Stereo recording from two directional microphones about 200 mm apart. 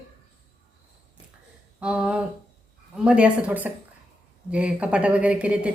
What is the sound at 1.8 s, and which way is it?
Speech, 5° right (ahead or behind).